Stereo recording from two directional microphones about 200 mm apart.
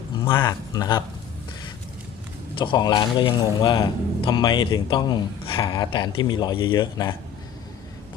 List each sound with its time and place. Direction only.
0.4 s speech: 20° left (ahead or behind)
2.6 s speech: 25° left (ahead or behind)